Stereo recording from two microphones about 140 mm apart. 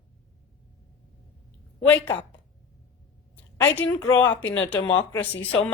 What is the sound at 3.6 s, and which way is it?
Speech, 15° left (ahead or behind).